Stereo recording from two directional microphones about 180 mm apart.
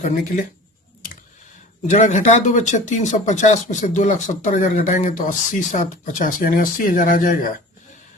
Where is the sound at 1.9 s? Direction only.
45° left (ahead or behind).